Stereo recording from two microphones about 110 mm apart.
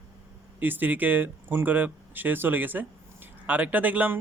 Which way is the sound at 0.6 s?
15° right (ahead or behind).